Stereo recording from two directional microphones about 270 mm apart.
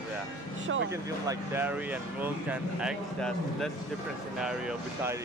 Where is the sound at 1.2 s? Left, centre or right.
Centre.